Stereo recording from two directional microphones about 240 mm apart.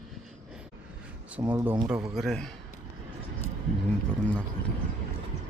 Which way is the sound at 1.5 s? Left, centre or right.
Centre.